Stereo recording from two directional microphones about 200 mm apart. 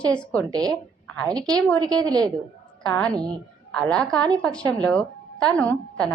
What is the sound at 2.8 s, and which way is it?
A woman's voice, 5° left (ahead or behind).